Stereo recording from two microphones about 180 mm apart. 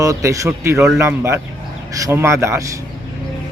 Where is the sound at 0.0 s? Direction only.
20° right (ahead or behind).